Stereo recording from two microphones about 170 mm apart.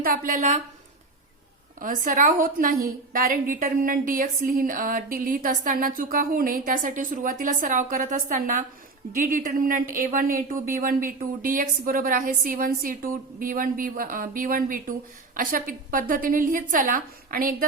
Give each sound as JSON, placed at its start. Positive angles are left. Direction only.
{"t": 0.0, "sound": "a woman's voice", "side_deg": -55}
{"t": 1.8, "sound": "a woman's voice", "side_deg": -55}